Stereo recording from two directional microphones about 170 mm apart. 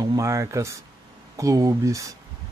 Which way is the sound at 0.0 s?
20° right (ahead or behind).